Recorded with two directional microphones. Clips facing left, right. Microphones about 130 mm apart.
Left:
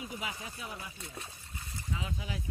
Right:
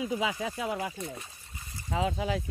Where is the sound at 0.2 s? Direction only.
90° right.